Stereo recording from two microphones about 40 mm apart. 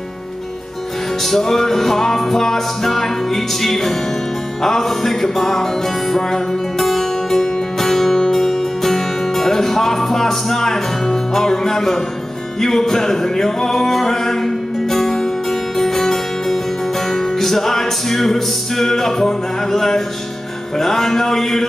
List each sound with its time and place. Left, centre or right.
1.2 s music: centre